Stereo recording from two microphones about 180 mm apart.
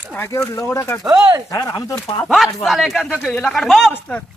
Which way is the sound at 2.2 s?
Centre (ahead or behind).